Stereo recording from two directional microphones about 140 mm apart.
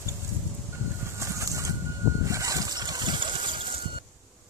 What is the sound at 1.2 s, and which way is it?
Bird, 20° right (ahead or behind).